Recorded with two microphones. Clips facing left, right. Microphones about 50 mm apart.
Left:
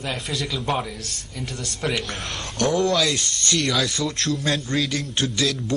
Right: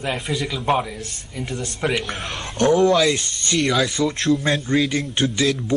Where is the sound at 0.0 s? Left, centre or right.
Centre.